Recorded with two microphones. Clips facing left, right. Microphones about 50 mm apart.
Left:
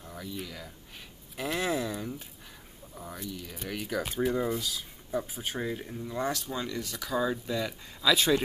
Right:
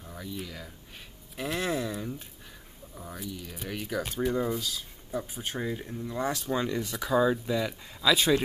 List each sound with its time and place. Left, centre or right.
0.0 s speech: centre
6.5 s speech: right
6.9 s speech: centre